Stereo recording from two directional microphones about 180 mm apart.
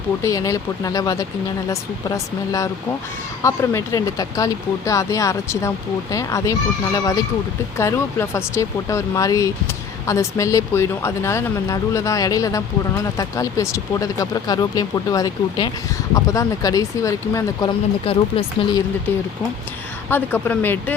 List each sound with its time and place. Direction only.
0.2 s speech: 20° left (ahead or behind)
20.1 s speech: 10° left (ahead or behind)